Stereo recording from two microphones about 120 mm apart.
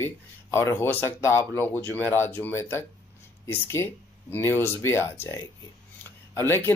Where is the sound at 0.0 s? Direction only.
20° left (ahead or behind).